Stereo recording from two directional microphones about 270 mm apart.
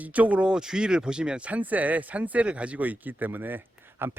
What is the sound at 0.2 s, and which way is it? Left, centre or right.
Speech, centre.